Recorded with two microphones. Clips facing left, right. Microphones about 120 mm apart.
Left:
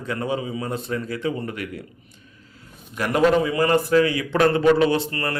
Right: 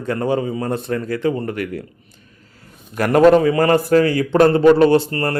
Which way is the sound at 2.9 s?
50° right (ahead or behind).